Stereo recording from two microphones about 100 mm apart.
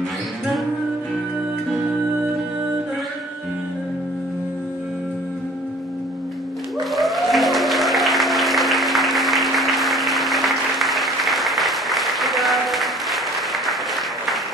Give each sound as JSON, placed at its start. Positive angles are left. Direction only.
{"t": 6.8, "sound": "music", "side_deg": 0}